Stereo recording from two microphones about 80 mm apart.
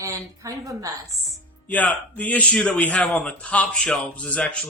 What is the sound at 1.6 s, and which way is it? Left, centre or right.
A man's voice, centre.